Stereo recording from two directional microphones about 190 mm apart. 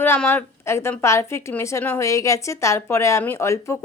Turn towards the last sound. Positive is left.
turn(degrees=15)  # may be behind; listen again after turning